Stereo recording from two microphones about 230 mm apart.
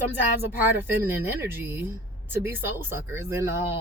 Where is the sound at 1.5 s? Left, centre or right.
Centre.